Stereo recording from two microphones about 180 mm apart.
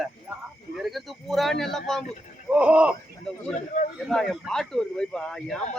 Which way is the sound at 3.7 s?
45° left (ahead or behind).